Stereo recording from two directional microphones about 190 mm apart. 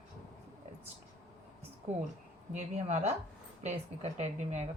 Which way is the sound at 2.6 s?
35° right (ahead or behind).